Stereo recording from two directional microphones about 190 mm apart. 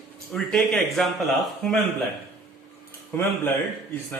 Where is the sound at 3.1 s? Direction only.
10° left (ahead or behind).